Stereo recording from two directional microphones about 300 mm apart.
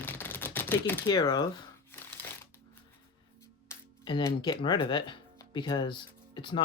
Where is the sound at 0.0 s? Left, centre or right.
Centre.